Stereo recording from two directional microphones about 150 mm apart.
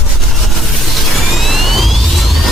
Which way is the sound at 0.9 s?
Centre (ahead or behind).